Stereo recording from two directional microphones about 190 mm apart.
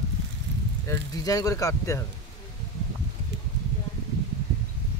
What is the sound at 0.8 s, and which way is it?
Speech, 20° left (ahead or behind).